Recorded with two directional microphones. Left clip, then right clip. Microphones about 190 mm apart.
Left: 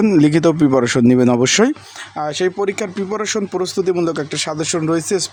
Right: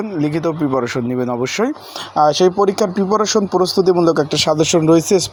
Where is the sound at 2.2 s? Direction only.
10° right (ahead or behind).